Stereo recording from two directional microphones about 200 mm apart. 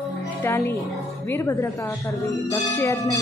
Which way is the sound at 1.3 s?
15° left (ahead or behind).